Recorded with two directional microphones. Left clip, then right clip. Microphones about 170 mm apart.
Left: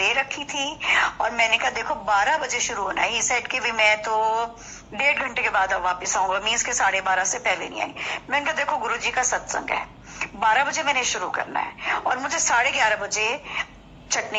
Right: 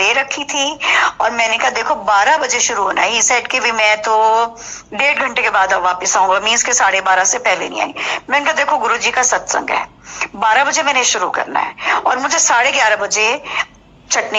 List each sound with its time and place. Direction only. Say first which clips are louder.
0.0 s a woman's voice: right 8 dB; 30° right (ahead or behind)